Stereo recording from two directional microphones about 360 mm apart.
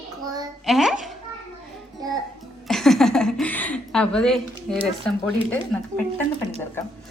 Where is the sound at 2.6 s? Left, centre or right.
Centre.